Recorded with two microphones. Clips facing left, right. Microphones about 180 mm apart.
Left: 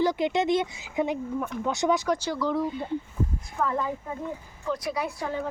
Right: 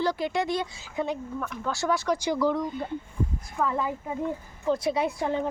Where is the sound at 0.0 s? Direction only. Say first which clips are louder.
Left 3 dB; 20° left (ahead or behind).